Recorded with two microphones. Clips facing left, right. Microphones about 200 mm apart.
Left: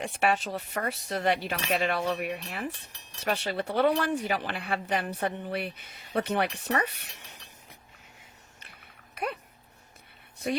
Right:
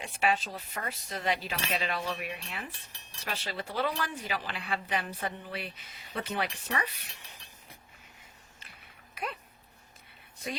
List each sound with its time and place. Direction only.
0.0 s speech: 65° left (ahead or behind)